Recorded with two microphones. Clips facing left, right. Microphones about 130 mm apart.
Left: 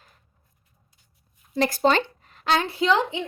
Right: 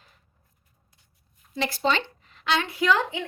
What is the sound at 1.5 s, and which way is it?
Speech, 45° left (ahead or behind).